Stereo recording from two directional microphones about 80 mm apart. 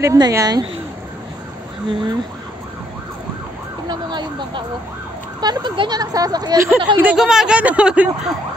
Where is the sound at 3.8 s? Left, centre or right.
Right.